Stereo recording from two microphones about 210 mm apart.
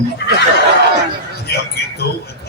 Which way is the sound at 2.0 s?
45° left (ahead or behind).